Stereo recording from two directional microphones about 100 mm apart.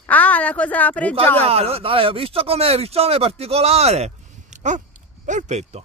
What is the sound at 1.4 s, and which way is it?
Speech, 85° right.